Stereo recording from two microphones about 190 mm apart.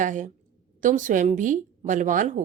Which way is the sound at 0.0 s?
40° right (ahead or behind).